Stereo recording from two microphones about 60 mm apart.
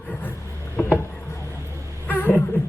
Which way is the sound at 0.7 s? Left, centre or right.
Left.